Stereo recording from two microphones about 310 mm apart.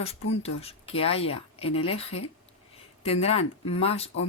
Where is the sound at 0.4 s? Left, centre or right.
Centre.